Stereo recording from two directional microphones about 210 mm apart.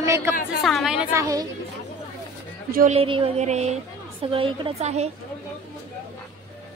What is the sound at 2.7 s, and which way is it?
Speech, 40° right (ahead or behind).